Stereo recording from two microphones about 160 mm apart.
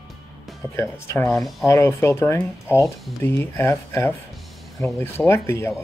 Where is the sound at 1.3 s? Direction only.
Centre (ahead or behind).